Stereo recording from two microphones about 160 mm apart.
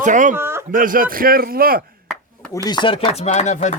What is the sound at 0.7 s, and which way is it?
A man's voice, 60° right (ahead or behind).